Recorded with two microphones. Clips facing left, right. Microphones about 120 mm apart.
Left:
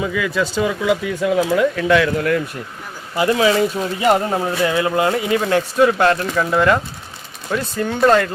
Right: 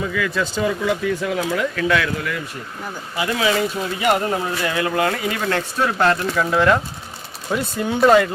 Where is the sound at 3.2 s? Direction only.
35° left (ahead or behind); by 5.9 s 15° left (ahead or behind).